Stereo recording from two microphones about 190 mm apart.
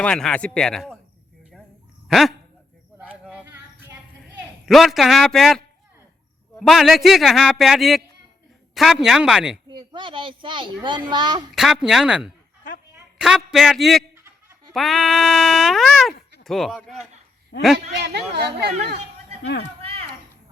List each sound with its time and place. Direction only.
0.0 s speech: 5° left (ahead or behind)
2.0 s speech: centre (ahead or behind)
3.0 s a sound: 10° right (ahead or behind)
4.4 s speech: centre (ahead or behind)
9.6 s speech: 25° right (ahead or behind)
11.5 s speech: centre (ahead or behind)
17.5 s a man's voice: 55° left (ahead or behind)
18.0 s speech: 60° right (ahead or behind)
19.4 s speech: 65° left (ahead or behind)